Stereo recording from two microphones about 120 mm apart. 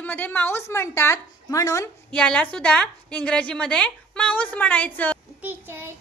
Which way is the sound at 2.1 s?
10° left (ahead or behind).